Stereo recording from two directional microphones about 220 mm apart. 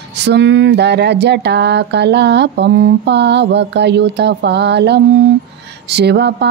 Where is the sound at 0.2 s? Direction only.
50° right (ahead or behind).